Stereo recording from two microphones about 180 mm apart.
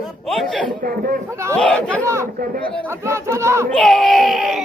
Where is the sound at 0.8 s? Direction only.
55° right (ahead or behind).